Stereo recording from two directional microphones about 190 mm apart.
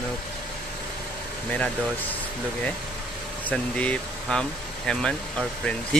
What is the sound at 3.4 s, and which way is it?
Speech, 5° left (ahead or behind).